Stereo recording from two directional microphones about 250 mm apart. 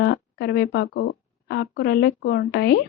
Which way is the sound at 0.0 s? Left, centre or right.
Left.